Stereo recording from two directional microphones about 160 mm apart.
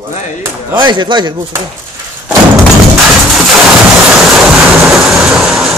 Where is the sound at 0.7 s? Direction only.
30° right (ahead or behind).